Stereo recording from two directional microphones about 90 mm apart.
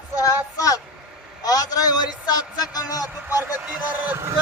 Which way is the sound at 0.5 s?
40° left (ahead or behind).